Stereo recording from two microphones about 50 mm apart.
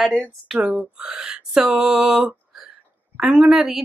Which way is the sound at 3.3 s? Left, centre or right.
Centre.